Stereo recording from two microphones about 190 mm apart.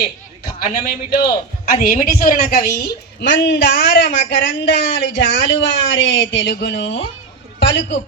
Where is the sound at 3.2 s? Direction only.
65° left (ahead or behind).